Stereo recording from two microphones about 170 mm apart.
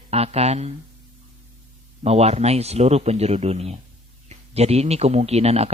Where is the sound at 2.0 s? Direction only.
40° right (ahead or behind).